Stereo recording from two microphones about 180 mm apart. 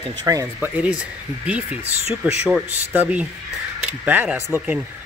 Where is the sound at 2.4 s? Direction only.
5° right (ahead or behind).